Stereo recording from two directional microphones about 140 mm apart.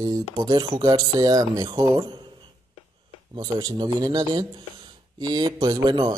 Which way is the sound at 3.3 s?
30° right (ahead or behind).